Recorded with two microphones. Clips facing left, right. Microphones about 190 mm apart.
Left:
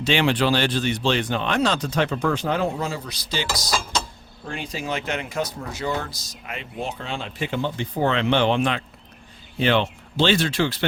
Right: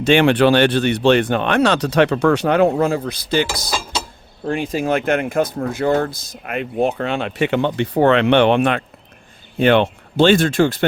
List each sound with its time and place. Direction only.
0.0 s speech: 55° right (ahead or behind)
3.7 s mechanisms: 5° right (ahead or behind)
4.4 s speech: 50° right (ahead or behind)